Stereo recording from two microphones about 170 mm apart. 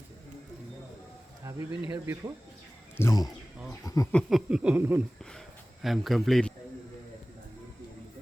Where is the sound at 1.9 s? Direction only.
15° right (ahead or behind).